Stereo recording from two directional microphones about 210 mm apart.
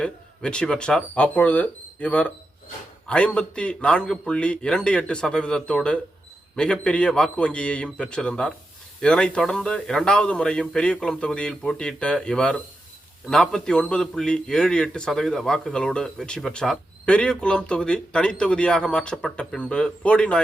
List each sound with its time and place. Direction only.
0.0 s a man's voice: 5° left (ahead or behind)